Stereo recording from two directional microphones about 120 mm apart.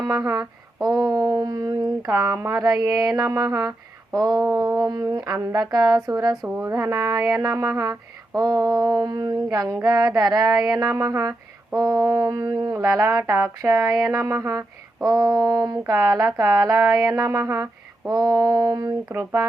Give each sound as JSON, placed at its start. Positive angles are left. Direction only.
{"t": 0.1, "sound": "humming", "side_deg": -30}
{"t": 3.2, "sound": "speech", "side_deg": -30}
{"t": 4.3, "sound": "a sound", "side_deg": 0}
{"t": 4.5, "sound": "speech", "side_deg": -30}
{"t": 8.5, "sound": "a sound", "side_deg": 0}
{"t": 8.8, "sound": "humming", "side_deg": -30}
{"t": 10.2, "sound": "speech", "side_deg": -35}
{"t": 18.1, "sound": "humming", "side_deg": -30}
{"t": 19.1, "sound": "speech", "side_deg": -25}